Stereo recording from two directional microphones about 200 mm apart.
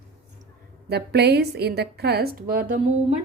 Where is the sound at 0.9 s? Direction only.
55° right (ahead or behind).